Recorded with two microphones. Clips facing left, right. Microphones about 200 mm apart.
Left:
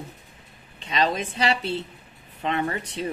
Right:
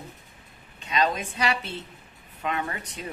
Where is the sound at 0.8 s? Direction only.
30° left (ahead or behind).